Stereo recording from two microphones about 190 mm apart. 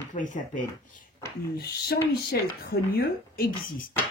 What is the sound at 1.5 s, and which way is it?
A woman's voice, 55° left (ahead or behind).